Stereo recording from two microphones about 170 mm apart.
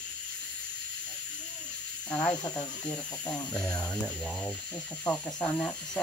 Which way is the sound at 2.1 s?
10° left (ahead or behind).